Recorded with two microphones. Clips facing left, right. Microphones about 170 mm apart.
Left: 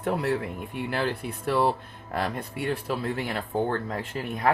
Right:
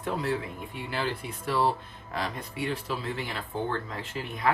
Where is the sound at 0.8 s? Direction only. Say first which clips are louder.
Left 4 dB; 55° left (ahead or behind).